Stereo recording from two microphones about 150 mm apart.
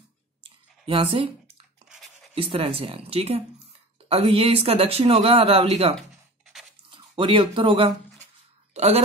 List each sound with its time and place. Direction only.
0.4 s clicking: 35° right (ahead or behind)
2.3 s speech: 40° right (ahead or behind)
5.9 s a sound: centre (ahead or behind)
6.9 s speech: 35° right (ahead or behind)